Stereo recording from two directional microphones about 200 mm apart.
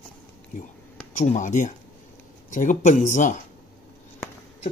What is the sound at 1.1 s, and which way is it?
Speech, 35° left (ahead or behind).